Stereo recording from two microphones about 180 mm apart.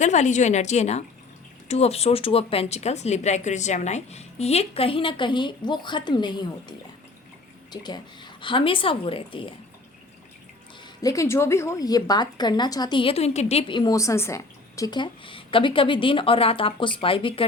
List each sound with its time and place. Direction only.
0.0 s a woman's voice: 40° left (ahead or behind)
11.0 s a woman's voice: 20° left (ahead or behind)